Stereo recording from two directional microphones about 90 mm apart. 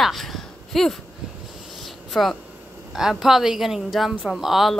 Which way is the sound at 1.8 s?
Centre (ahead or behind).